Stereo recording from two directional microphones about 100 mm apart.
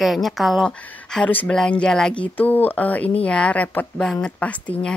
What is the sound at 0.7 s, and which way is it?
Speech, 10° left (ahead or behind).